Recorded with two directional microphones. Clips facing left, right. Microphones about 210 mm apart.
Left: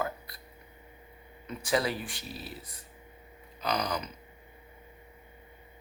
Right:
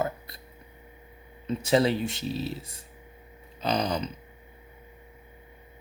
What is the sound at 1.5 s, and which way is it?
Speech, 25° right (ahead or behind).